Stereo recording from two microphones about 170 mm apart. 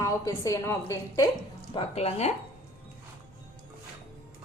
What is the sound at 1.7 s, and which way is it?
Speech, 35° left (ahead or behind).